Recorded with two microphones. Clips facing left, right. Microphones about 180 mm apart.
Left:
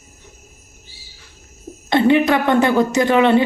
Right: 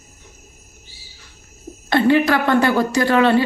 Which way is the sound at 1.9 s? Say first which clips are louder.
Left 1 dB; 20° left (ahead or behind).